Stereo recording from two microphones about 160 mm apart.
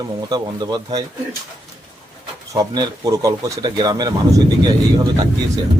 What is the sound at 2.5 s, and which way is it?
Speech, 25° right (ahead or behind).